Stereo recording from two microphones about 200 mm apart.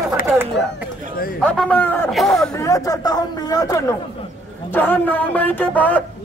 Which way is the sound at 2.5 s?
15° left (ahead or behind).